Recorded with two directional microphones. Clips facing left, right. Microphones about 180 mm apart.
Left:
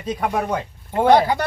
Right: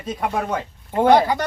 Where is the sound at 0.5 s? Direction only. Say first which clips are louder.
Right 1 dB; 10° left (ahead or behind).